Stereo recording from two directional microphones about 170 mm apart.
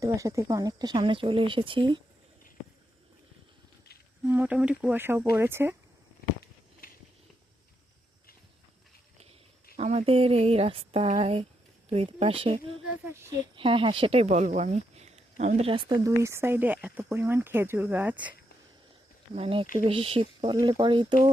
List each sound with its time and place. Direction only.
0.0 s speech: 20° right (ahead or behind)
4.2 s speech: 10° right (ahead or behind)
6.8 s walk: 60° left (ahead or behind)
9.7 s speech: 35° right (ahead or behind)
13.1 s speech: 15° right (ahead or behind)
13.6 s speech: 30° right (ahead or behind); by 18.3 s 10° right (ahead or behind)
19.4 s speech: 30° right (ahead or behind)